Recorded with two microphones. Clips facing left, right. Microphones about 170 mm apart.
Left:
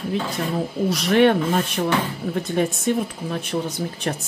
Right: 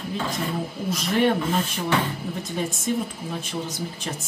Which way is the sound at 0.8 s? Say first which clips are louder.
Left 5 dB; 75° left (ahead or behind).